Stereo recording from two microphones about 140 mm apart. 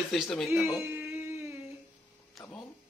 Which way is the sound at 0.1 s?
Centre (ahead or behind).